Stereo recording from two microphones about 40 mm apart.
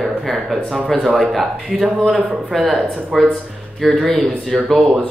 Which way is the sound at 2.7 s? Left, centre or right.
Centre.